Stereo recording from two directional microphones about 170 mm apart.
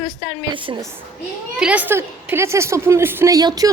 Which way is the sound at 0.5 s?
30° right (ahead or behind).